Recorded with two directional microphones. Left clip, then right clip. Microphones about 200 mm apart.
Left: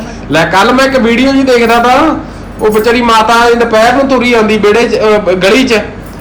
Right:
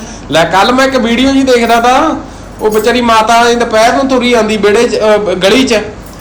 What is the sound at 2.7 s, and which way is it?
A man's voice, centre (ahead or behind).